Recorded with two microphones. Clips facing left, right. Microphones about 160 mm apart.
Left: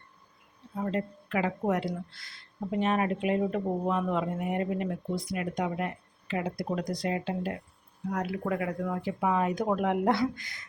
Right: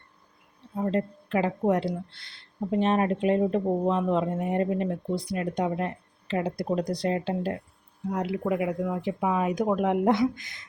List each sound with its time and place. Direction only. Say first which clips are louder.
0.8 s speech: right 4 dB; 30° right (ahead or behind)